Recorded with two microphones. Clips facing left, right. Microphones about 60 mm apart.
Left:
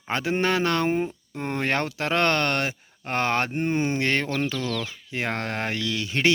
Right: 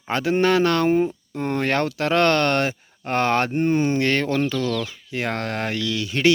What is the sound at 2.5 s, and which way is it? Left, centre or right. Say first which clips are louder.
Speech: right 5 dB; centre.